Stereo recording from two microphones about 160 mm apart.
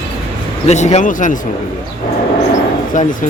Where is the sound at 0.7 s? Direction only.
45° left (ahead or behind).